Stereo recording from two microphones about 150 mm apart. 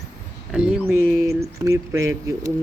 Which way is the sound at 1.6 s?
20° right (ahead or behind).